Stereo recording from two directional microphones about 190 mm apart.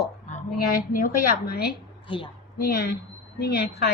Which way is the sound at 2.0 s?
25° left (ahead or behind).